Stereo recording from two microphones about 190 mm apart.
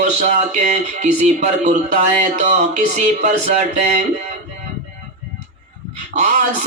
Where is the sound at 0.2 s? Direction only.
40° right (ahead or behind).